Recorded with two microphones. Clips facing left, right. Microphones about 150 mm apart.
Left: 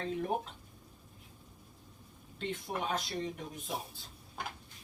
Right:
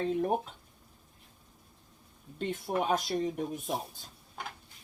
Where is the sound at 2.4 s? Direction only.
45° right (ahead or behind).